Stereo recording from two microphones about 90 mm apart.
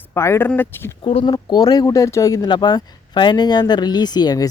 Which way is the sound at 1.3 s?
45° left (ahead or behind).